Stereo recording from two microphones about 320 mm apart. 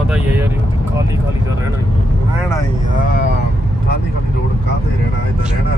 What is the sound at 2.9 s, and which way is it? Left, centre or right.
Vehicle, left.